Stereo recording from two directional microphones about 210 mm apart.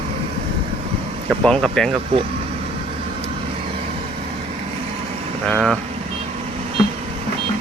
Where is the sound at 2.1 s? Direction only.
25° right (ahead or behind).